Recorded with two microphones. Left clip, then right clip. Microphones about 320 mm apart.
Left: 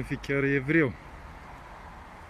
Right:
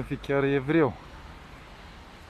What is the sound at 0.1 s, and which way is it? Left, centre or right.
Speech, right.